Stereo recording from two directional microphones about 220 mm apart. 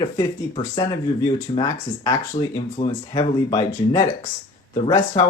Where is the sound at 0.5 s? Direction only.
20° left (ahead or behind).